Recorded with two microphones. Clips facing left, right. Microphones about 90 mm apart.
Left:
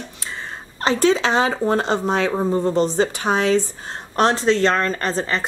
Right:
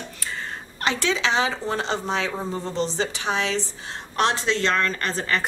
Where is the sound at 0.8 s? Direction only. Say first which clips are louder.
Left 6 dB; 40° left (ahead or behind).